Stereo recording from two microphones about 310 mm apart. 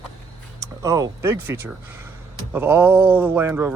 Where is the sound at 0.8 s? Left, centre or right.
Centre.